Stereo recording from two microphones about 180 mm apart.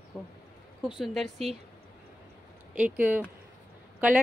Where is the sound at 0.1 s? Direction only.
Centre (ahead or behind).